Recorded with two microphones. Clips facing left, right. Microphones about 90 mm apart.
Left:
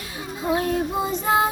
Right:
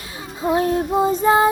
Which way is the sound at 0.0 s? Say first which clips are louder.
Even; 30° right (ahead or behind).